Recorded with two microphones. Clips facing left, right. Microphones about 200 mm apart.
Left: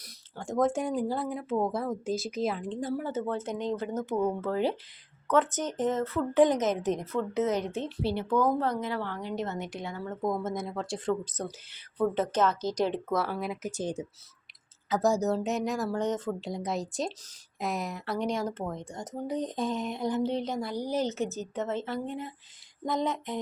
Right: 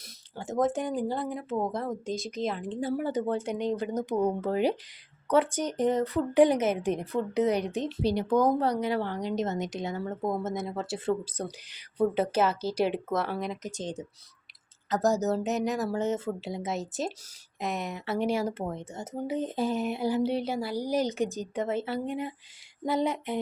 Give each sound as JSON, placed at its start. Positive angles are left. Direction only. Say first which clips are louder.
{"t": 0.6, "sound": "speech", "louder": "even", "side_deg": 0}
{"t": 2.9, "sound": "a woman's voice", "louder": "right 4 dB", "side_deg": -15}
{"t": 10.2, "sound": "speech", "louder": "left 1 dB", "side_deg": -5}